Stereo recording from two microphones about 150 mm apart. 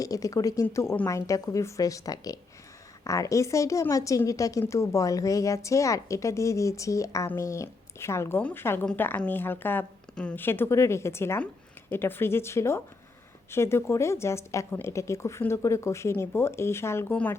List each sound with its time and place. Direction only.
0.0 s a woman's voice: 25° left (ahead or behind)